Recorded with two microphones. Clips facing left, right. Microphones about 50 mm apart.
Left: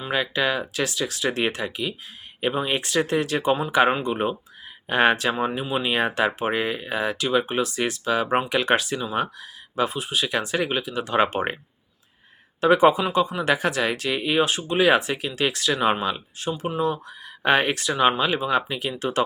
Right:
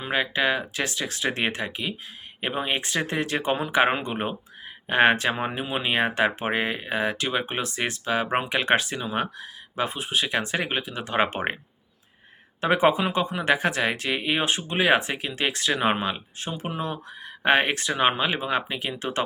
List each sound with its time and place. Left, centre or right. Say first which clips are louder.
0.1 s speech: even; right
12.5 s speech: left 4 dB; right
16.5 s speech: left 6 dB; right